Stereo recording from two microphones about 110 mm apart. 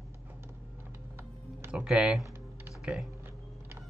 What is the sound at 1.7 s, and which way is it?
Speech, 5° right (ahead or behind).